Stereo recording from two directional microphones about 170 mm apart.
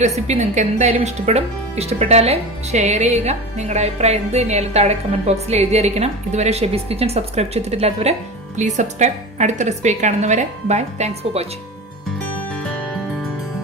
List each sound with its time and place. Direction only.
0.3 s a woman's voice: 45° right (ahead or behind)
12.7 s music: 10° left (ahead or behind)